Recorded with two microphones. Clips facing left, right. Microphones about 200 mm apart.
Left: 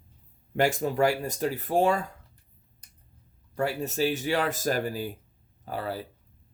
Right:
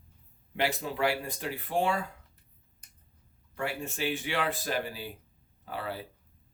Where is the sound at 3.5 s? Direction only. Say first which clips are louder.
Left 6 dB; 40° left (ahead or behind).